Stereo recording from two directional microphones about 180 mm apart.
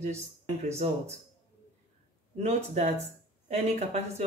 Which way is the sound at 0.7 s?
35° right (ahead or behind).